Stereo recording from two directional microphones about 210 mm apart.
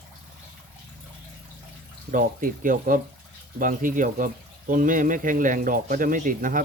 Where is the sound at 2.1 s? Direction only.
40° right (ahead or behind).